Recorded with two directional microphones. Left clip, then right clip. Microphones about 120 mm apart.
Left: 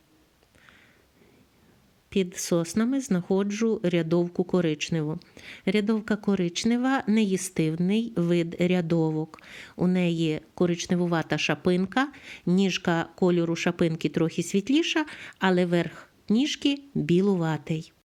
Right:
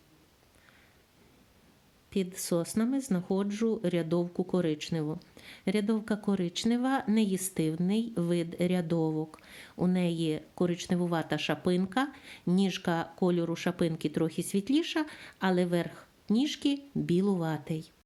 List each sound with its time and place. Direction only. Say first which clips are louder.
2.0 s speech: left 6 dB; 40° left (ahead or behind)